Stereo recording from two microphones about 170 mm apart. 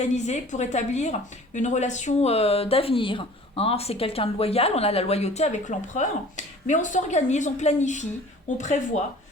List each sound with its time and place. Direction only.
0.3 s a woman's voice: 45° left (ahead or behind)